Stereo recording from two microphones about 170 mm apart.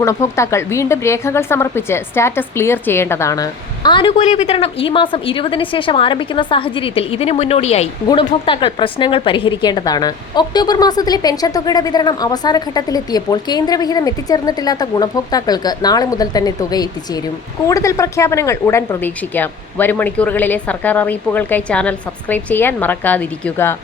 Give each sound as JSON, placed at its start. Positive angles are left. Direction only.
{"t": 0.0, "sound": "speech", "side_deg": 15}
{"t": 4.2, "sound": "a woman's voice", "side_deg": 40}